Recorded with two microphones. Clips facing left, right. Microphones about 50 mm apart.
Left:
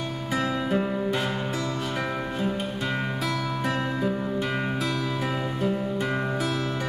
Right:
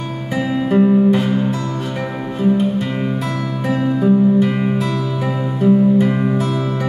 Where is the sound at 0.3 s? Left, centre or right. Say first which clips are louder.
Right 7 dB; centre.